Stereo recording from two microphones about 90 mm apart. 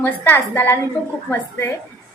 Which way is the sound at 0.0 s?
20° left (ahead or behind).